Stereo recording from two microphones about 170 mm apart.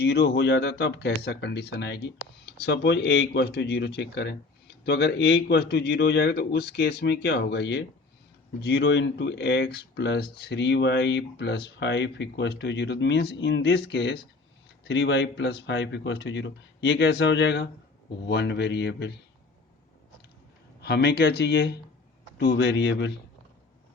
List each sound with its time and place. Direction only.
0.0 s speech: 75° left (ahead or behind)
4.9 s speech: 75° left (ahead or behind)
14.8 s speech: 90° left
20.8 s speech: 75° left (ahead or behind); by 23.1 s 90° left